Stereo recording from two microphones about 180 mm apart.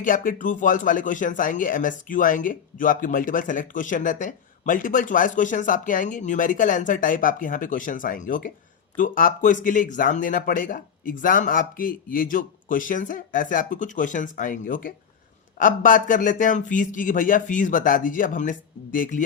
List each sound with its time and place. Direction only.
0.0 s speech: 50° left (ahead or behind)